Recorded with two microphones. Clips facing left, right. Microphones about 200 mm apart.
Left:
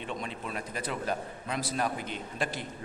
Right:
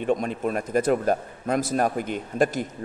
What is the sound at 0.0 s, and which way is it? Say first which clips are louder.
A man's voice: right 13 dB; 50° right (ahead or behind).